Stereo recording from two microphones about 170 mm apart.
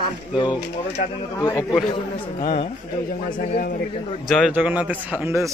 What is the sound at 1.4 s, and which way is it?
Speech, 20° left (ahead or behind).